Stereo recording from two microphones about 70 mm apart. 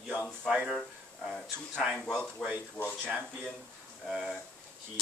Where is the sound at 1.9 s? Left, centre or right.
Centre.